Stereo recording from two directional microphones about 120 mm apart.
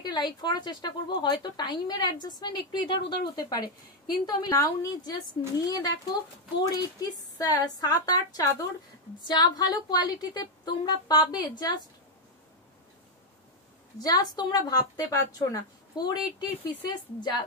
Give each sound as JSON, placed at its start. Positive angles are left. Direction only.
{"t": 0.0, "sound": "speech", "side_deg": 35}
{"t": 14.0, "sound": "speech", "side_deg": 35}